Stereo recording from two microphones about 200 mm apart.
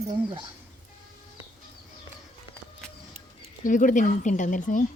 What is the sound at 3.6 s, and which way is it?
Speech, 40° left (ahead or behind).